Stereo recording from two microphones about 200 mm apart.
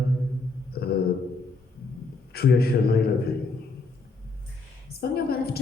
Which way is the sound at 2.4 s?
50° left (ahead or behind).